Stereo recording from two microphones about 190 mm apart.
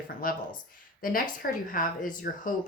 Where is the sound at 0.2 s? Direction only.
45° left (ahead or behind).